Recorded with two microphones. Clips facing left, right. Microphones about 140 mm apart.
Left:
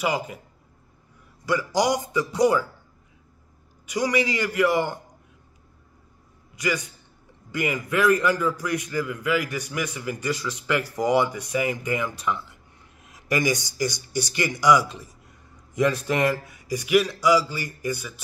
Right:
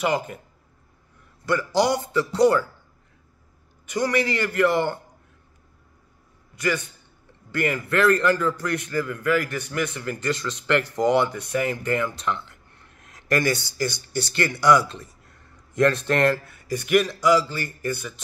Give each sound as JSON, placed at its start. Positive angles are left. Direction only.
{"t": 0.0, "sound": "a man's voice", "side_deg": 10}
{"t": 1.4, "sound": "a man's voice", "side_deg": 10}
{"t": 3.8, "sound": "a man's voice", "side_deg": 10}
{"t": 6.5, "sound": "a man's voice", "side_deg": 10}